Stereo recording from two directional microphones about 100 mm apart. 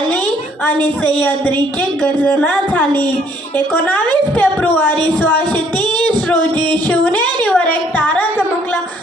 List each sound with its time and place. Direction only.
0.6 s a woman's voice: 15° left (ahead or behind)
6.8 s a woman's voice: 15° left (ahead or behind)